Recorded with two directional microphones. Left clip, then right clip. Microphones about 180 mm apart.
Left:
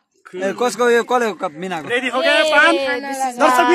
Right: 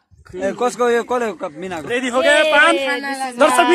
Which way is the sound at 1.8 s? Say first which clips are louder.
Right 1 dB; 25° right (ahead or behind).